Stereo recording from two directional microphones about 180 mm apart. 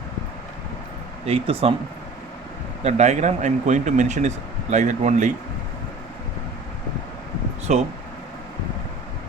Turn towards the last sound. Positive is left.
turn(degrees=-40)  # may be behind; listen again after turning